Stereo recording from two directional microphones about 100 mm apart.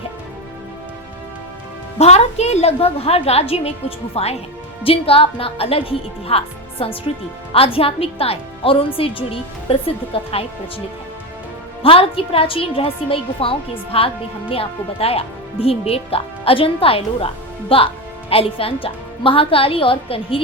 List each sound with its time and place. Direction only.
2.0 s a woman's voice: 90° left
4.8 s a woman's voice: 70° left (ahead or behind)
11.8 s a woman's voice: 70° left (ahead or behind)